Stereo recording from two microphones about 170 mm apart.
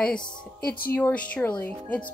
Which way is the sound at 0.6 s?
60° left (ahead or behind).